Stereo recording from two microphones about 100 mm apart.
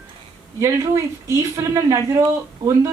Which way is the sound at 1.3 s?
35° right (ahead or behind).